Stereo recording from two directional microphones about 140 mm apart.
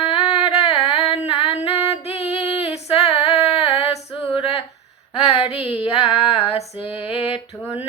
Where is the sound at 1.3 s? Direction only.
40° left (ahead or behind).